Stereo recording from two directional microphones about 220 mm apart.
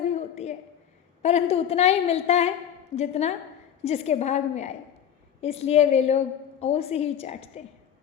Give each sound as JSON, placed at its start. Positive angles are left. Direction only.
{"t": 1.2, "sound": "a woman's voice", "side_deg": 30}